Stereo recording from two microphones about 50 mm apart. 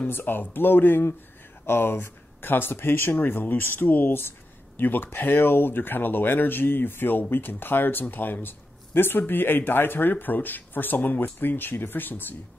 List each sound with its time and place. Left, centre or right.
0.1 s speech: left